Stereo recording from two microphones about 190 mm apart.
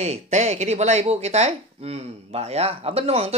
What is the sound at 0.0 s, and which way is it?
Speech, 35° right (ahead or behind).